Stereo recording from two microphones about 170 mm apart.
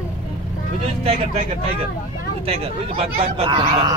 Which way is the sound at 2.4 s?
35° right (ahead or behind).